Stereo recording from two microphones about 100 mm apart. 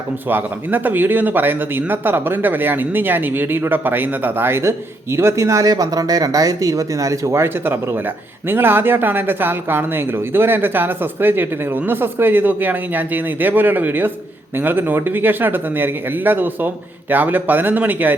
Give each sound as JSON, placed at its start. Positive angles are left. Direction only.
{"t": 0.3, "sound": "speech", "side_deg": -20}